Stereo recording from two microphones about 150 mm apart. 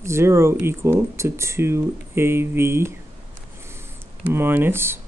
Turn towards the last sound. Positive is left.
turn(degrees=-15)  # may be behind; listen again after turning